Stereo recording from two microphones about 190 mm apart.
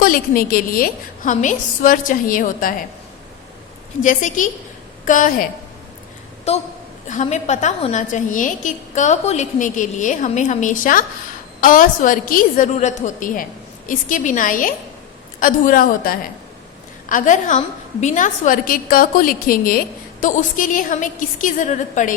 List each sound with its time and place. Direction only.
0.0 s a woman's voice: 50° left (ahead or behind)
4.0 s a woman's voice: 40° left (ahead or behind)
6.5 s a woman's voice: 35° left (ahead or behind)